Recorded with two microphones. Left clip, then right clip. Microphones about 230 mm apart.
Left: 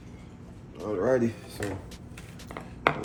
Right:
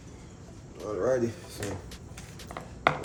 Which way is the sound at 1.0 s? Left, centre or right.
Left.